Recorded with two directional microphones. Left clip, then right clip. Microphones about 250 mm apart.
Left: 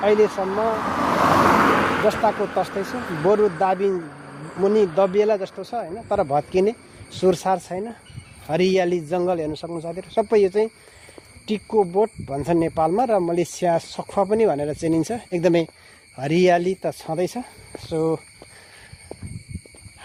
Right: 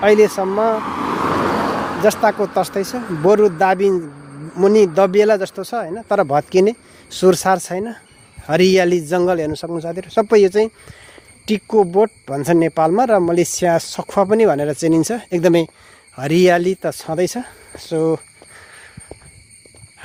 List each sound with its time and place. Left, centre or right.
0.0 s speech: right
0.8 s vehicle: left
2.2 s speech: right